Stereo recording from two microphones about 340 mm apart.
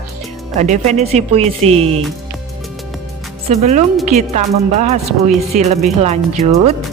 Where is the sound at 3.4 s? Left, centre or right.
Centre.